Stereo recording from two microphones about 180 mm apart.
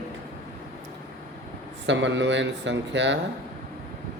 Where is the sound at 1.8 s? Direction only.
90° right.